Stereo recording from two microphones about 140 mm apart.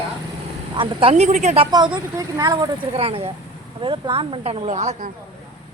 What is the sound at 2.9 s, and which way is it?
Speech, 40° right (ahead or behind).